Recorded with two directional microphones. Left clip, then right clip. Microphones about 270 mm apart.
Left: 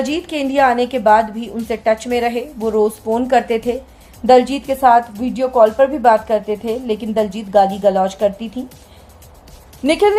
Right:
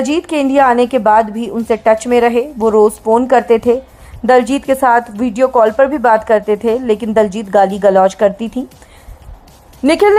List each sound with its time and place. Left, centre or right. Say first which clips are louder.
0.0 s a woman's voice: right 5 dB; right
9.8 s a woman's voice: right 4 dB; right